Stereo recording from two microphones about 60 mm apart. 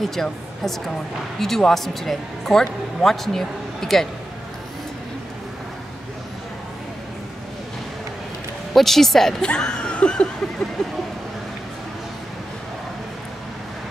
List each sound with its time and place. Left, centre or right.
0.0 s speech: centre
8.7 s speech: centre
9.5 s a sound: centre